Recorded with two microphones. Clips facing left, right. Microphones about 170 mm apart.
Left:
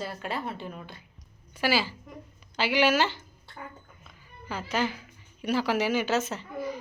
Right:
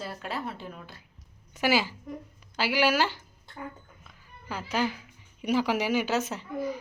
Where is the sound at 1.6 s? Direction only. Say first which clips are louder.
Right 1 dB; 15° right (ahead or behind).